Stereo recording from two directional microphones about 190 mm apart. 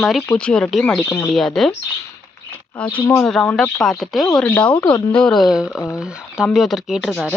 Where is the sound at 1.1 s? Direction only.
20° left (ahead or behind).